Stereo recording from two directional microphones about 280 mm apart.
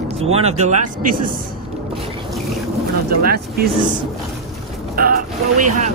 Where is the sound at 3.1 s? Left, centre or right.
Right.